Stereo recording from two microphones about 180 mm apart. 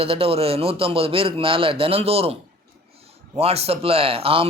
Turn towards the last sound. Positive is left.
turn(degrees=-30)  # may be behind; listen again after turning